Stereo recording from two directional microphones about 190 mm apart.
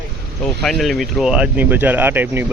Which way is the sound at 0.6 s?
Centre (ahead or behind).